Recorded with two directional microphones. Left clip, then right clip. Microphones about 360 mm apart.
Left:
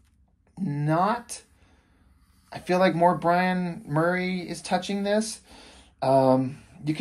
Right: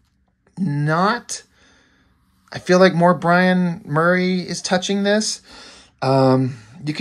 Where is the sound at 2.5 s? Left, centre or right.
Centre.